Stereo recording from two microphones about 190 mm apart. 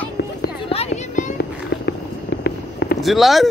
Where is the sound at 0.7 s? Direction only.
35° left (ahead or behind).